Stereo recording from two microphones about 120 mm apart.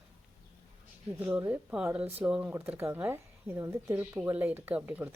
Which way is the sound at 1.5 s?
10° right (ahead or behind).